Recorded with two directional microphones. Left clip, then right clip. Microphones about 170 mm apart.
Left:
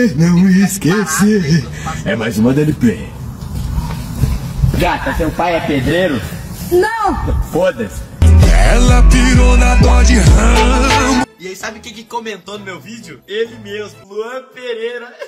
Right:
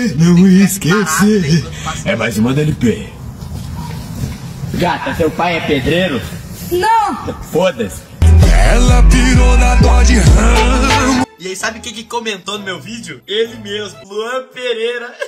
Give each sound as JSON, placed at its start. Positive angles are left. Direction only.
{"t": 0.0, "sound": "speech", "side_deg": 0}
{"t": 4.7, "sound": "speech", "side_deg": 0}
{"t": 6.6, "sound": "a sound", "side_deg": 0}
{"t": 7.5, "sound": "speech", "side_deg": 0}
{"t": 12.1, "sound": "speech", "side_deg": -15}